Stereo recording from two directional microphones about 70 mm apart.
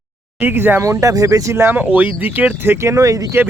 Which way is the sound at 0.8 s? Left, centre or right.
Right.